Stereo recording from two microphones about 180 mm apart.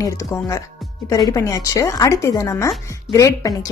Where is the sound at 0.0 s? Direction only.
15° left (ahead or behind).